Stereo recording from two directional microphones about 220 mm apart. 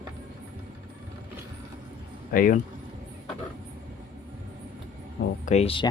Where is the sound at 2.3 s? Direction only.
40° left (ahead or behind).